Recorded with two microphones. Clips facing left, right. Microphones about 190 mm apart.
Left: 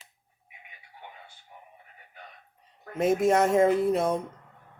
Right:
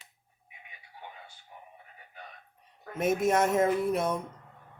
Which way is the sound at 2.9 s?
30° left (ahead or behind).